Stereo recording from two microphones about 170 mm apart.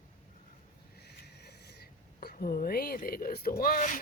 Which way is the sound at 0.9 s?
70° left (ahead or behind).